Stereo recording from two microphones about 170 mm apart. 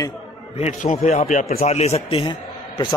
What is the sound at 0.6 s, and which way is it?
Speech, 40° left (ahead or behind).